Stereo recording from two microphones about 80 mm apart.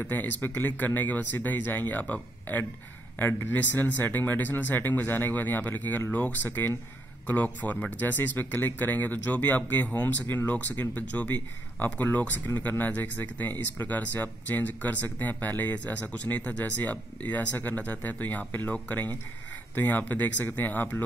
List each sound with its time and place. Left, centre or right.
0.0 s speech: left